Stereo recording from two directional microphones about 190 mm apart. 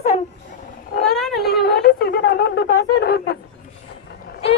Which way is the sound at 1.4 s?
60° left (ahead or behind).